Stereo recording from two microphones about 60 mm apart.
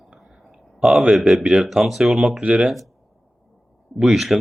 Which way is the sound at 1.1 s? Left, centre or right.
Centre.